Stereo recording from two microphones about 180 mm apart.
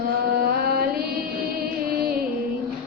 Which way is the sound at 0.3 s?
60° right (ahead or behind).